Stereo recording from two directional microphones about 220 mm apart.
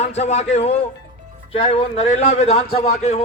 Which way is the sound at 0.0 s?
30° left (ahead or behind).